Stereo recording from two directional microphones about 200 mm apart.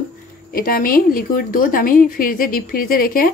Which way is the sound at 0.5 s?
45° left (ahead or behind).